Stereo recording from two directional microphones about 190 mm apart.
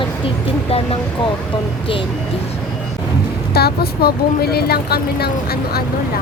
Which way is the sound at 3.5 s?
55° left (ahead or behind).